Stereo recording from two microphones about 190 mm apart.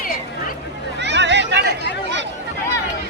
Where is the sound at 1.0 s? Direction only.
65° right (ahead or behind).